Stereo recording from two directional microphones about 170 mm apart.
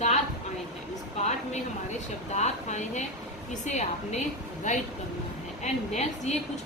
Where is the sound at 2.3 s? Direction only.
45° left (ahead or behind).